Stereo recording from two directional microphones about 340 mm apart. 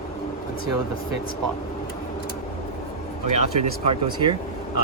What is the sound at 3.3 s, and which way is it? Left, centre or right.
Speech, centre.